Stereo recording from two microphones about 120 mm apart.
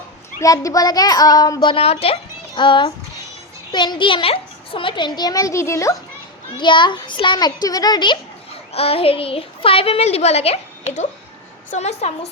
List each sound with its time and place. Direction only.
0.3 s a child's voice: 30° left (ahead or behind)
1.6 s a woman's voice: 50° left (ahead or behind)
2.6 s a child's voice: 40° left (ahead or behind); by 6.0 s 25° left (ahead or behind)
6.6 s a child's voice: 40° left (ahead or behind)
8.7 s a woman's voice: 55° left (ahead or behind)